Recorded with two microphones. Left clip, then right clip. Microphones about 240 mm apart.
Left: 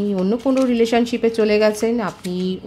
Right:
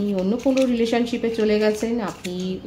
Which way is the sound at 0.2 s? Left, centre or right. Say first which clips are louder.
Left 1 dB; left.